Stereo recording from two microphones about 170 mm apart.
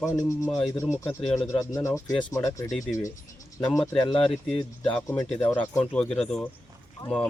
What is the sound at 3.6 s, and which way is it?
Speech, 5° left (ahead or behind).